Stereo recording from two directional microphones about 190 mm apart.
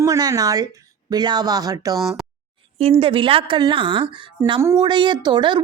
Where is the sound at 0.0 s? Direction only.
20° right (ahead or behind).